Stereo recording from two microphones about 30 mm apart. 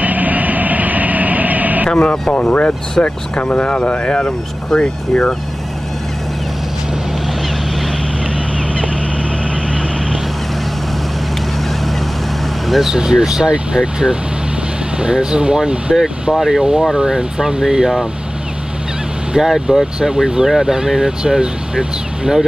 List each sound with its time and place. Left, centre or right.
0.0 s vehicle: right
1.9 s speech: left
2.5 s speech: left
4.6 s speech: left
12.8 s speech: right
16.3 s speech: centre
16.9 s speech: right
19.3 s speech: centre